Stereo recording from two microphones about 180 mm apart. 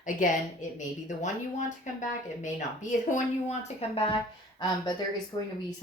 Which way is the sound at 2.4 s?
45° left (ahead or behind).